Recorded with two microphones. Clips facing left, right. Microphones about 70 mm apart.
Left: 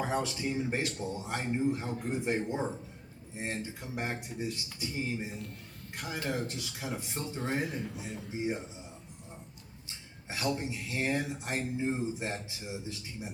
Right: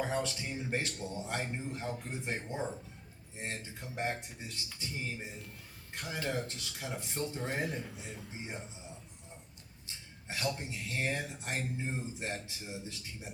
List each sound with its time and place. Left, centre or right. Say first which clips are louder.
0.0 s speech: left 3 dB; centre
0.7 s speech: left 3 dB; centre
0.9 s speech: left 2 dB; centre
10.2 s speech: left 4 dB; centre